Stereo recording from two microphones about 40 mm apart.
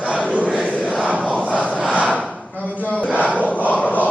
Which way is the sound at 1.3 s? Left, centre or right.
Left.